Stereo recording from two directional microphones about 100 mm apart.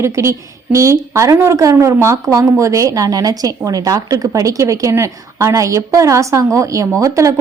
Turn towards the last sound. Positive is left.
turn(degrees=-30)  # may be behind; listen again after turning